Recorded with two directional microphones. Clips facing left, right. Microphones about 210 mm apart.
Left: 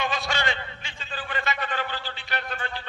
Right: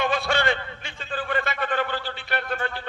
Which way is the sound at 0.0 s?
55° right (ahead or behind).